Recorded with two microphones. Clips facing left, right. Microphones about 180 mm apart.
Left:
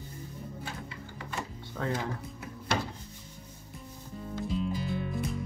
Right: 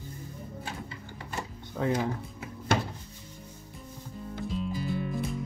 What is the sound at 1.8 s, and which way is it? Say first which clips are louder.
Speech: right 5 dB; 15° right (ahead or behind).